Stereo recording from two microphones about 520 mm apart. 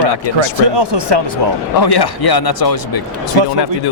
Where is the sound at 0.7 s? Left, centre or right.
Right.